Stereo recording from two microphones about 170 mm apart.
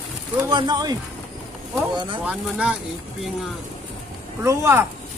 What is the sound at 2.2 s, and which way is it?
Speech, 5° right (ahead or behind).